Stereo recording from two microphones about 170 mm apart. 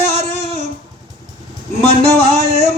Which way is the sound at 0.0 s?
35° left (ahead or behind).